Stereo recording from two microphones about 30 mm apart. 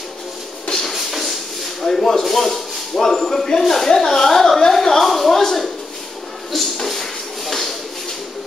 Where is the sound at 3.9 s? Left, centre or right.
Centre.